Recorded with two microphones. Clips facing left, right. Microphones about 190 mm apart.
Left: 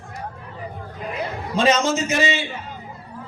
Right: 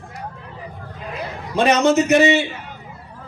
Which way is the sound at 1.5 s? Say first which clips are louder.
Right 4 dB; 65° right (ahead or behind).